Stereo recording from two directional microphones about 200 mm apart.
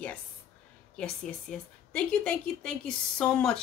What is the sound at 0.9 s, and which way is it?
Speech, 5° left (ahead or behind).